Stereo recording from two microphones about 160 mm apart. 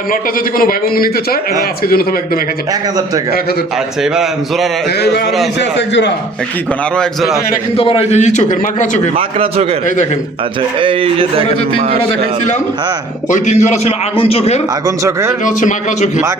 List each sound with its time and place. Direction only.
0.1 s a man's voice: 65° left (ahead or behind)
4.0 s a man's voice: 5° right (ahead or behind)
4.9 s a man's voice: 90° left
6.9 s a man's voice: centre (ahead or behind)
7.8 s a man's voice: 35° left (ahead or behind); by 9.0 s 50° left (ahead or behind)
9.1 s a man's voice: 40° right (ahead or behind)
10.8 s a man's voice: 35° right (ahead or behind)
13.2 s a man's voice: 50° left (ahead or behind)
14.8 s speech: 20° right (ahead or behind)
15.4 s a man's voice: 50° left (ahead or behind)